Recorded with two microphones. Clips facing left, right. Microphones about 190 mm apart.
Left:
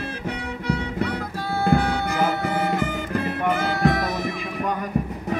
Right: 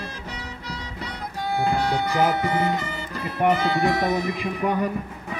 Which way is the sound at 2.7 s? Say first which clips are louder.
Left 5 dB; 55° left (ahead or behind).